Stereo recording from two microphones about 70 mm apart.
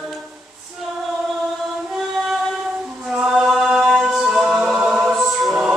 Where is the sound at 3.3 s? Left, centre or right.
Centre.